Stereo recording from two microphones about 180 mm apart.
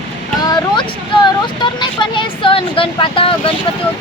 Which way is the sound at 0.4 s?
25° left (ahead or behind).